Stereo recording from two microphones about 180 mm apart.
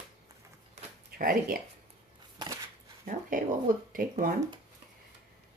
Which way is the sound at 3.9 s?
50° right (ahead or behind).